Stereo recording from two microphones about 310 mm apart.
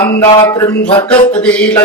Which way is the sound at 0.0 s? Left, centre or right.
Centre.